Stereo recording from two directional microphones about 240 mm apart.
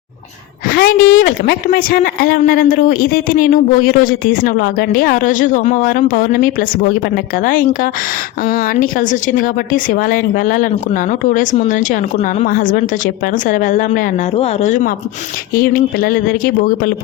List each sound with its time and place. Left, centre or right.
0.7 s speech: left